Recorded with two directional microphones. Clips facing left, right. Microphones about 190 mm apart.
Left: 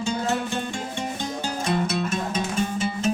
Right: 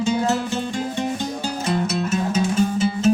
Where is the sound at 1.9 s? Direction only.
5° right (ahead or behind).